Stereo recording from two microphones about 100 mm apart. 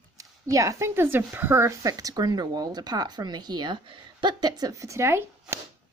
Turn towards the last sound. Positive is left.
turn(degrees=-30)  # may be behind; listen again after turning